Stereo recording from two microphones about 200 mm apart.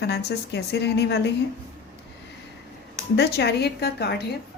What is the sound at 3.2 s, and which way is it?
Speech, 55° left (ahead or behind).